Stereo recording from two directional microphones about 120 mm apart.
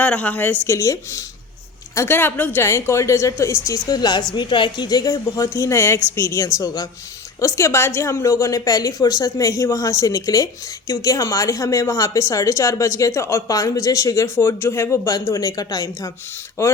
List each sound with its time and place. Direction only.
0.0 s a woman's voice: 10° left (ahead or behind)
3.8 s a woman's voice: 35° left (ahead or behind)